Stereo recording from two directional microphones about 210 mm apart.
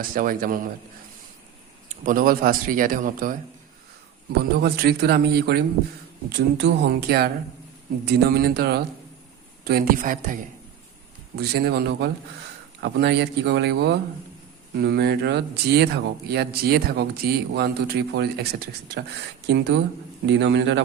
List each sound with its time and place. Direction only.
0.1 s speech: 40° right (ahead or behind)
2.0 s speech: 45° right (ahead or behind)
11.3 s speech: 50° right (ahead or behind)